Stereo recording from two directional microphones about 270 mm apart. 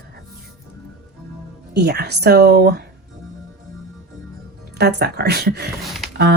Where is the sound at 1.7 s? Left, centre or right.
Right.